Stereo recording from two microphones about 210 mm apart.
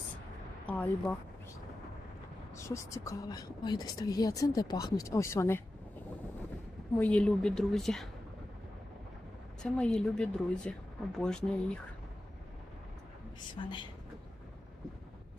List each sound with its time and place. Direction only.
0.7 s speech: 5° left (ahead or behind)
2.6 s speech: 15° left (ahead or behind)
7.0 s speech: 5° left (ahead or behind)
9.6 s speech: 5° left (ahead or behind)
13.6 s speech: 25° left (ahead or behind)